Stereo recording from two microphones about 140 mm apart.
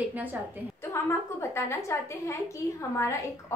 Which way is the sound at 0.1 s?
15° right (ahead or behind).